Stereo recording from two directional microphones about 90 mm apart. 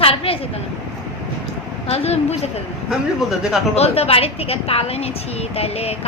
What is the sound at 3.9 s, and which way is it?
A woman's voice, 90° left.